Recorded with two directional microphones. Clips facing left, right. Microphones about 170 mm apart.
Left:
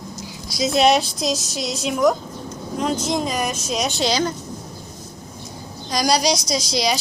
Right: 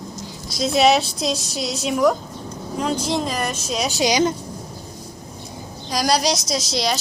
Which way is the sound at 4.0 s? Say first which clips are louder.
Right 5 dB; 15° right (ahead or behind).